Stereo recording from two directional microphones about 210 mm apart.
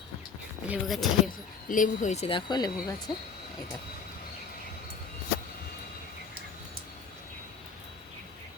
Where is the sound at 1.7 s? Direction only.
40° left (ahead or behind); by 2.7 s 20° left (ahead or behind).